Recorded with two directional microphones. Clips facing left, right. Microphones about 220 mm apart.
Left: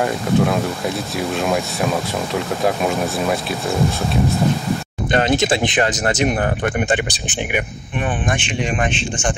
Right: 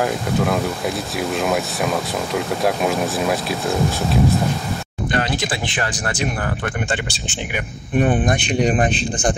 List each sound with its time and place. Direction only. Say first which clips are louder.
0.0 s speech: left 2 dB; centre (ahead or behind)
5.1 s speech: left 6 dB; 25° left (ahead or behind)
8.0 s speech: right 4 dB; 40° right (ahead or behind)